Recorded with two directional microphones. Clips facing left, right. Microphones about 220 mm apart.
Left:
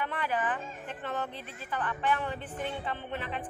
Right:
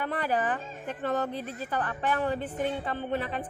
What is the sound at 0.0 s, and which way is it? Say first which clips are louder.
A woman's voice: right 4 dB; 40° right (ahead or behind).